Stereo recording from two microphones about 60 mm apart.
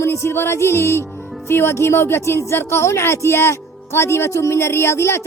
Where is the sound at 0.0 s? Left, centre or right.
Left.